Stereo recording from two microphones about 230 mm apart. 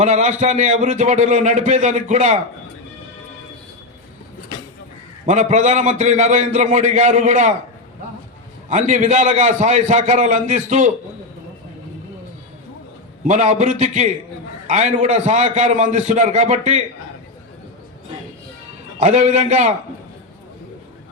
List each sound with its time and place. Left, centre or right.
0.0 s a man's voice: right
5.2 s a man's voice: right
8.7 s a man's voice: right
13.2 s a man's voice: right
18.9 s a man's voice: right